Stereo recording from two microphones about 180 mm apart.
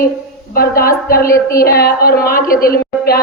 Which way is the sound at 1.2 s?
15° left (ahead or behind).